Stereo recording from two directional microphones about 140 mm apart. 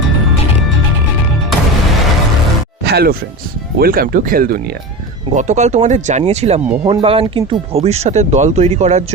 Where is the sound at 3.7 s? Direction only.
90° right.